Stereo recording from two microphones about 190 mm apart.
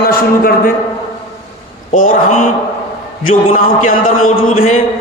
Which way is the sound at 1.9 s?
40° left (ahead or behind).